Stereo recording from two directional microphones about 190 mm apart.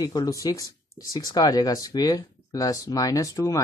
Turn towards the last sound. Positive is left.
turn(degrees=15)  # may be behind; listen again after turning